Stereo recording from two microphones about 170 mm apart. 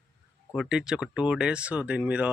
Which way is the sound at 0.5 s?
5° right (ahead or behind).